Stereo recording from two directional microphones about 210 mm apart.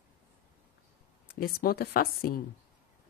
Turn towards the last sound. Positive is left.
turn(degrees=45)  # may be behind; listen again after turning